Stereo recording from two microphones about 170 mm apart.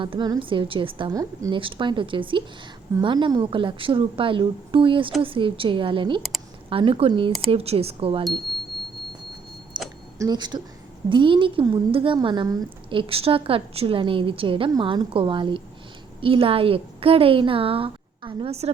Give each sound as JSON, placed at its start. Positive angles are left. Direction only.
{"t": 0.0, "sound": "a woman's voice", "side_deg": -30}
{"t": 9.7, "sound": "a sound", "side_deg": -25}
{"t": 10.2, "sound": "a woman's voice", "side_deg": -25}